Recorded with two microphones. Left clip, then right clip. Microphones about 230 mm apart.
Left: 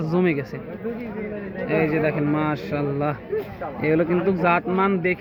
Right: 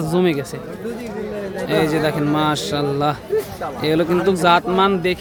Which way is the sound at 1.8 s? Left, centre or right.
Centre.